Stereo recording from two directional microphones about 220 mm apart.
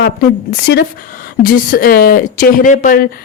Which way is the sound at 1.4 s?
40° left (ahead or behind).